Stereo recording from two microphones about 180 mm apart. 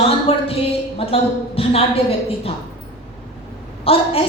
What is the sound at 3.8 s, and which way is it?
Speech, 30° left (ahead or behind).